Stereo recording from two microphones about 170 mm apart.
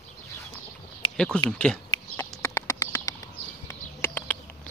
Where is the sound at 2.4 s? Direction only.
15° left (ahead or behind).